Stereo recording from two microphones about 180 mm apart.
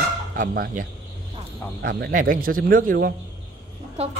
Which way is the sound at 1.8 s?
60° right (ahead or behind).